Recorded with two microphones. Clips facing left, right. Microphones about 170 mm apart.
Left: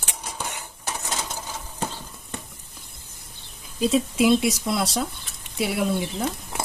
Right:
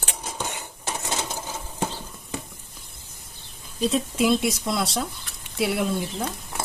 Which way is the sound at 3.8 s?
5° left (ahead or behind).